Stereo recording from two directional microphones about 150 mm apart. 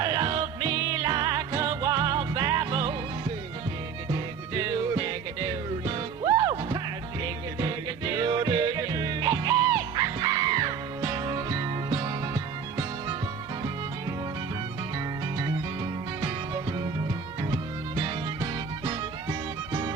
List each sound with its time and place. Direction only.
0.0 s music: 30° right (ahead or behind)
4.1 s music: 25° right (ahead or behind)
17.5 s music: 25° right (ahead or behind)